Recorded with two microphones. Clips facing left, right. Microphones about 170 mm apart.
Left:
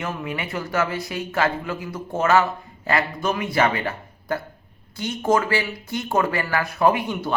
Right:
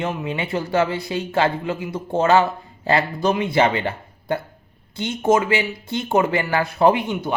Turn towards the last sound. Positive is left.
turn(degrees=-20)  # may be behind; listen again after turning